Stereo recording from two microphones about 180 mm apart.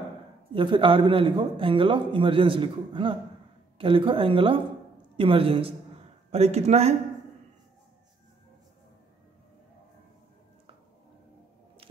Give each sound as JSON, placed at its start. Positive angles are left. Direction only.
{"t": 0.5, "sound": "a man's voice", "side_deg": -30}